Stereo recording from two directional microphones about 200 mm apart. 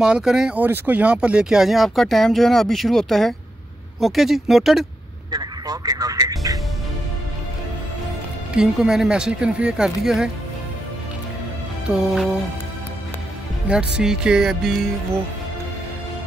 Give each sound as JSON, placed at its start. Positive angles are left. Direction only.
{"t": 0.0, "sound": "speech", "side_deg": -5}
{"t": 5.3, "sound": "music", "side_deg": -20}
{"t": 8.5, "sound": "speech", "side_deg": -5}
{"t": 11.9, "sound": "speech", "side_deg": 0}
{"t": 13.9, "sound": "speech", "side_deg": -5}